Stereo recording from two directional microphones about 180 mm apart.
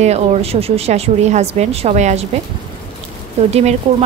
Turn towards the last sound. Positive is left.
turn(degrees=-35)  # may be behind; listen again after turning